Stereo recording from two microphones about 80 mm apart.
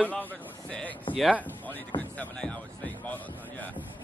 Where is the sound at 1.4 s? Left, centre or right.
Left.